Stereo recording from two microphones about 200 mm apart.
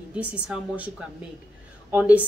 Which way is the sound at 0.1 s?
5° right (ahead or behind).